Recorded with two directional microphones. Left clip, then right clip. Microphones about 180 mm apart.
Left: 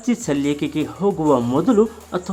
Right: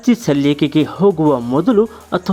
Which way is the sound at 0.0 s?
30° right (ahead or behind).